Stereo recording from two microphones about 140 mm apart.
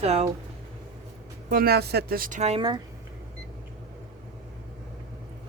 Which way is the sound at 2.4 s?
40° right (ahead or behind).